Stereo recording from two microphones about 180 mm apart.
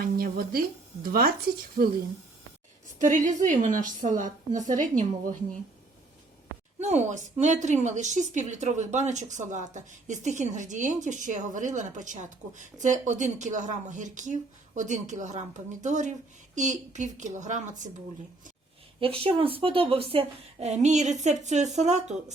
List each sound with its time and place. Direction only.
0.0 s speech: 55° right (ahead or behind)
1.8 s speech: 55° right (ahead or behind)
3.0 s a woman's voice: 45° right (ahead or behind)
6.7 s a woman's voice: 40° right (ahead or behind)
18.9 s a woman's voice: 30° right (ahead or behind)